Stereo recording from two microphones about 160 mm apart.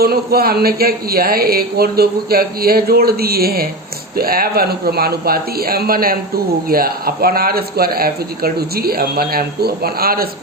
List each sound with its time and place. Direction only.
0.0 s speech: 75° right (ahead or behind)